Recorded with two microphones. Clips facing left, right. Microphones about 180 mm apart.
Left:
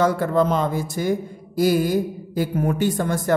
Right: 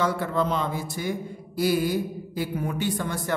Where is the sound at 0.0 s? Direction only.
45° left (ahead or behind).